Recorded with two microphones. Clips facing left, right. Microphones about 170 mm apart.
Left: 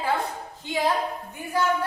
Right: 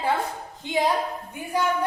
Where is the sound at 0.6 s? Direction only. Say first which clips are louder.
Right 1 dB; 20° right (ahead or behind).